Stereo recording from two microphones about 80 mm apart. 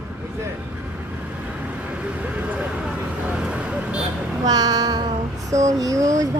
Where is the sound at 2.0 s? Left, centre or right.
Centre.